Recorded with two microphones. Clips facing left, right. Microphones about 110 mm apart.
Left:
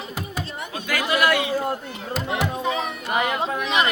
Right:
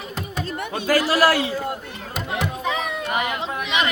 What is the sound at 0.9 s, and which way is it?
Speech, 35° right (ahead or behind).